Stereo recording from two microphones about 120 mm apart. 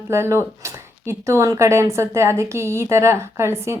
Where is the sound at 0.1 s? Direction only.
20° right (ahead or behind).